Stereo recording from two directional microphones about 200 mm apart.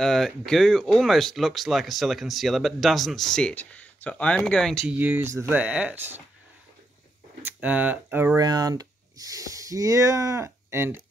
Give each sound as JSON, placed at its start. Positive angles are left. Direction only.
{"t": 0.0, "sound": "speech", "side_deg": 0}
{"t": 4.9, "sound": "speech", "side_deg": -10}
{"t": 7.4, "sound": "speech", "side_deg": -5}